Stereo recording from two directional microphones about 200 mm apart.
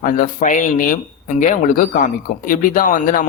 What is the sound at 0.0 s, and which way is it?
Speech, 40° left (ahead or behind).